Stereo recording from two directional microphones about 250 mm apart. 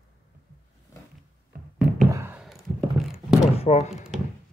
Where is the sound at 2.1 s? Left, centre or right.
Centre.